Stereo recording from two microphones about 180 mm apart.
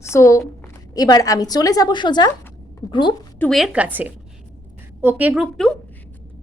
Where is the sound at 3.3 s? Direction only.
5° left (ahead or behind).